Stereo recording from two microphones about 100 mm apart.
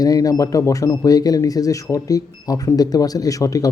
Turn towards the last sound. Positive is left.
turn(degrees=35)  # may be behind; listen again after turning